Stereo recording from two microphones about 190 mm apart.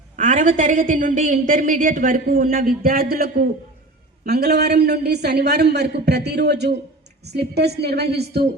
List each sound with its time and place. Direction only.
0.2 s a woman's voice: 40° right (ahead or behind); by 8.4 s 60° right (ahead or behind)